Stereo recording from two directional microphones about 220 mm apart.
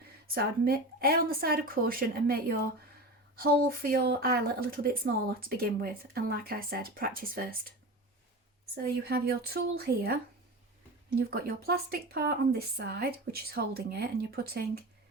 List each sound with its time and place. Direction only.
0.3 s speech: 45° right (ahead or behind)
8.7 s speech: 45° right (ahead or behind)
11.3 s speech: 45° right (ahead or behind)